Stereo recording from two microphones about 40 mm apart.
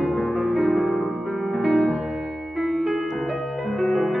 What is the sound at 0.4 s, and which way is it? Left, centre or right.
Music, centre.